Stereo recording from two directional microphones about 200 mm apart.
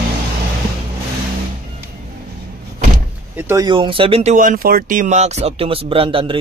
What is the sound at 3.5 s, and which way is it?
Speech, 20° right (ahead or behind).